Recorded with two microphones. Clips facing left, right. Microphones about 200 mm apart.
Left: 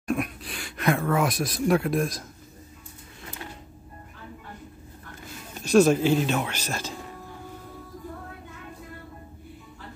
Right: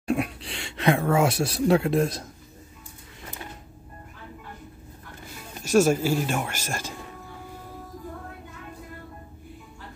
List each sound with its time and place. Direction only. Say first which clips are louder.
0.1 s speech: right 2 dB; 30° right (ahead or behind)
5.6 s speech: left 2 dB; 10° right (ahead or behind)